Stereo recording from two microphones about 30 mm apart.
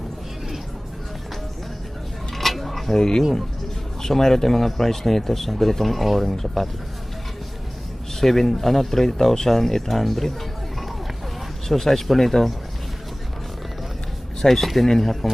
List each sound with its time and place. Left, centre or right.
2.4 s a sound: centre
2.9 s speech: left; by 6.7 s centre
8.2 s speech: centre
11.7 s speech: centre
14.4 s speech: centre